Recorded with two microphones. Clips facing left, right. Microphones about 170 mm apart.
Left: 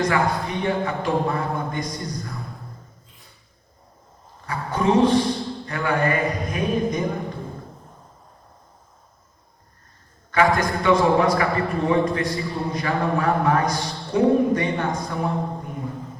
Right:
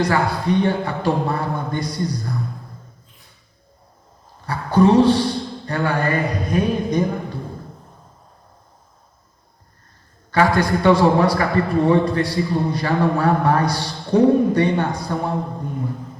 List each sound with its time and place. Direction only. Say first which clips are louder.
0.0 s a man's voice: right 2 dB; 35° right (ahead or behind)
4.4 s a man's voice: right 7 dB; 35° right (ahead or behind)
10.3 s a man's voice: right 2 dB; 35° right (ahead or behind)